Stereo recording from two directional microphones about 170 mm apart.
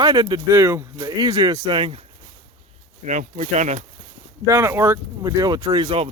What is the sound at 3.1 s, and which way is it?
Speech, 45° right (ahead or behind).